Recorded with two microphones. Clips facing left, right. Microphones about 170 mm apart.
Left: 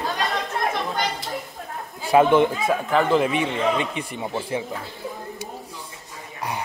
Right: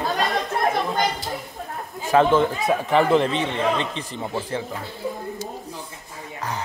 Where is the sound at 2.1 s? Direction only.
10° left (ahead or behind).